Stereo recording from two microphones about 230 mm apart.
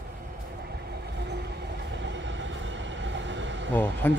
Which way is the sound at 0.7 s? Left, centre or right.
Right.